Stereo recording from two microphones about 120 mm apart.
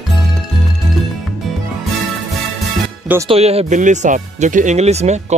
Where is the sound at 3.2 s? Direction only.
55° right (ahead or behind).